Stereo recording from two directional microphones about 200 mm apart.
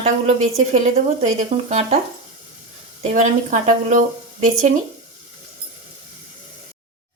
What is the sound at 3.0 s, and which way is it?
Speech, 35° right (ahead or behind).